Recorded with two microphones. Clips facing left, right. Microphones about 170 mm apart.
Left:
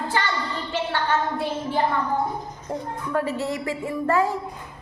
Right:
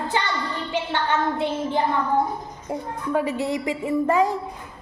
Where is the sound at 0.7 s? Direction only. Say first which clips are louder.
Even; 20° right (ahead or behind).